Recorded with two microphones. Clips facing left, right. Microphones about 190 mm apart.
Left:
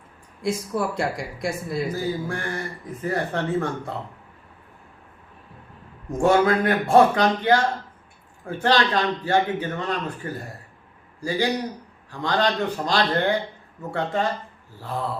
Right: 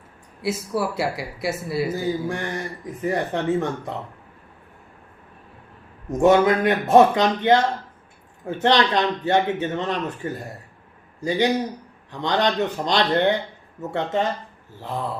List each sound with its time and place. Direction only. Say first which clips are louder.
0.4 s speech: even; 5° right (ahead or behind)
1.9 s speech: right 2 dB; 20° right (ahead or behind)
6.1 s a man's voice: right 2 dB; 20° right (ahead or behind)